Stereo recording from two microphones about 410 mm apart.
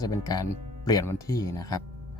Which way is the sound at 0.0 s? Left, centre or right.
Centre.